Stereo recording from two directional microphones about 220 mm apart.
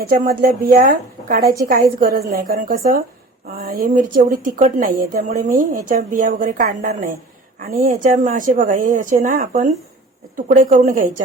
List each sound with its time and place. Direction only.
0.0 s a woman's voice: 40° right (ahead or behind)